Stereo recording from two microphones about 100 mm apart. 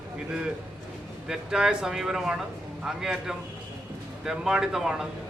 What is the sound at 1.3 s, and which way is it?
A man's voice, 5° right (ahead or behind).